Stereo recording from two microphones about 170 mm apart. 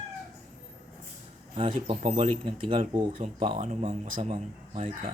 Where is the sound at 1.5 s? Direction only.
35° right (ahead or behind).